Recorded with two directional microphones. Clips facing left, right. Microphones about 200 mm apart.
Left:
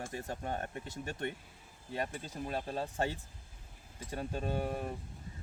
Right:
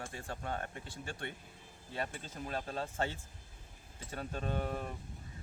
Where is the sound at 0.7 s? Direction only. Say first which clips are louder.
Left 4 dB; 40° left (ahead or behind).